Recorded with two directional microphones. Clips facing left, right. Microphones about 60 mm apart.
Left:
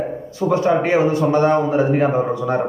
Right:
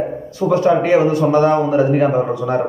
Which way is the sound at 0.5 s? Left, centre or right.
Left.